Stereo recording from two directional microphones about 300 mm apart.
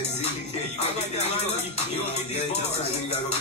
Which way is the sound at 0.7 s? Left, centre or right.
Left.